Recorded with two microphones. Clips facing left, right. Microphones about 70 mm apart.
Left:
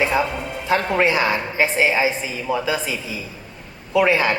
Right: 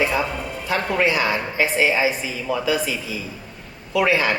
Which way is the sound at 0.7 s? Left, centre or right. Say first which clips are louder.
Left 2 dB; left.